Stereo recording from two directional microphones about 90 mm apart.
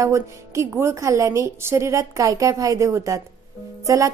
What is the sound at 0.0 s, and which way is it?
A woman's voice, 35° right (ahead or behind).